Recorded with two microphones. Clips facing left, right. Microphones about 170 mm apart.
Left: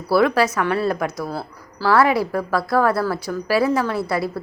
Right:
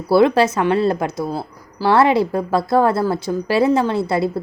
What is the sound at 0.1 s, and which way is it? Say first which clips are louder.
A woman's voice: right 3 dB; 25° right (ahead or behind).